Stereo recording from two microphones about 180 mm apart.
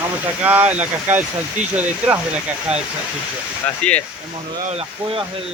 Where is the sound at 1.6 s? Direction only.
40° right (ahead or behind).